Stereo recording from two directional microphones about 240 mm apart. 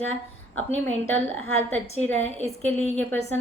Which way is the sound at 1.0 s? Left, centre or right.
Centre.